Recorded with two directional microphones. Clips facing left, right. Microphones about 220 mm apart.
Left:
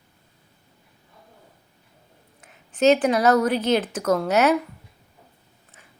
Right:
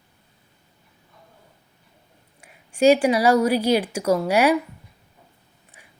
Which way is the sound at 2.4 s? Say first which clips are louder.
Right 2 dB; 10° right (ahead or behind).